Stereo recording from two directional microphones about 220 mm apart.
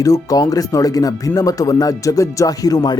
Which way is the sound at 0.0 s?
15° left (ahead or behind).